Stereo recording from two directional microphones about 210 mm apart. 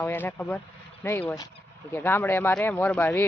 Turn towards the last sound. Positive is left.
turn(degrees=10)  # may be behind; listen again after turning